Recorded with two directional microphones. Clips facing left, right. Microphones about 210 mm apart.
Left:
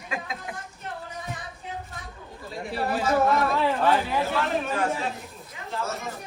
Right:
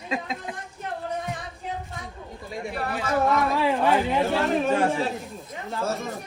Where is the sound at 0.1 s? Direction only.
25° right (ahead or behind).